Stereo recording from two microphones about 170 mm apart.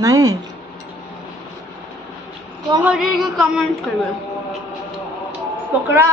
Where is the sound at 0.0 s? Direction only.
20° right (ahead or behind).